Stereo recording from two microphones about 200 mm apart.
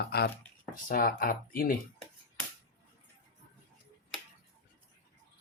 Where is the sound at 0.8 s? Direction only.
45° left (ahead or behind).